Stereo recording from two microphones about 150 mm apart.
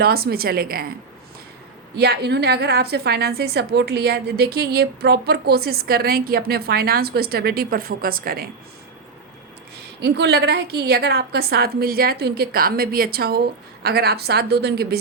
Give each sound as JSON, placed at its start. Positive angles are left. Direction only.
{"t": 0.0, "sound": "a woman's voice", "side_deg": -90}
{"t": 2.0, "sound": "a woman's voice", "side_deg": -90}
{"t": 10.0, "sound": "a woman's voice", "side_deg": -90}